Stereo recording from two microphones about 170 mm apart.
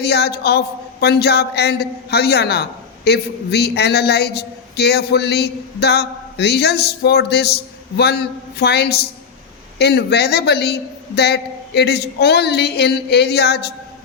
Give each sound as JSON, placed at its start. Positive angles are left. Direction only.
{"t": 0.0, "sound": "speech", "side_deg": 70}